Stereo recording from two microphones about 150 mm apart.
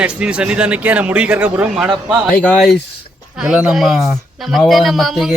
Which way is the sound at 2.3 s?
10° left (ahead or behind).